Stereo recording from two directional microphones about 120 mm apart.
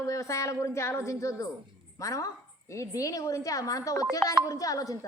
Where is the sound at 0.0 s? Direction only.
25° left (ahead or behind).